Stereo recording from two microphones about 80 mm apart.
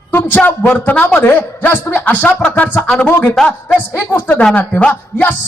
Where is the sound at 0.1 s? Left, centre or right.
Left.